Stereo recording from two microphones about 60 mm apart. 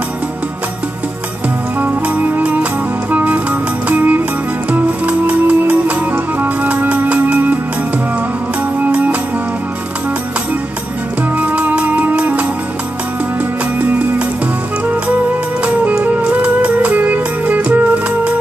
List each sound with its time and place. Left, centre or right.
1.8 s music: right
8.8 s music: right
11.3 s music: right
13.7 s music: right
15.6 s music: right